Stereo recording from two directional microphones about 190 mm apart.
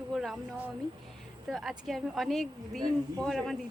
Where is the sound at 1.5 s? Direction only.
Centre (ahead or behind).